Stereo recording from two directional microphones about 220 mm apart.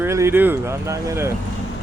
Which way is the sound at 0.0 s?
10° right (ahead or behind).